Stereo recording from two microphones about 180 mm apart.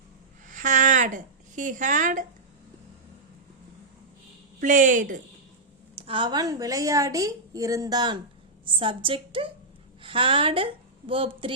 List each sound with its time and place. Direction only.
0.4 s a sound: 45° right (ahead or behind)
4.6 s a woman's voice: 45° right (ahead or behind)
6.0 s a woman's voice: 30° right (ahead or behind)